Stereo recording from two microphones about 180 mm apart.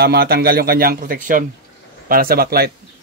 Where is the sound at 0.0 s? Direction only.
60° right (ahead or behind).